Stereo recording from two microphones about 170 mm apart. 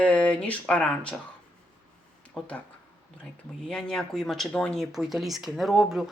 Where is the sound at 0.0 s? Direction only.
5° left (ahead or behind).